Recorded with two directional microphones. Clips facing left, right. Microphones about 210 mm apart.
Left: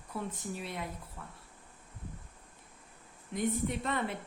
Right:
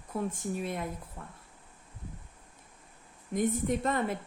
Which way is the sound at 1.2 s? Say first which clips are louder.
Right 2 dB; 35° right (ahead or behind).